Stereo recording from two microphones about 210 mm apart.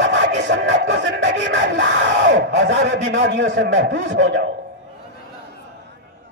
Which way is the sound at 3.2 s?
60° right (ahead or behind).